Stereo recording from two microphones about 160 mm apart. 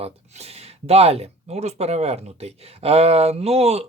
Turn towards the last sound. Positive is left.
turn(degrees=-40)  # may be behind; listen again after turning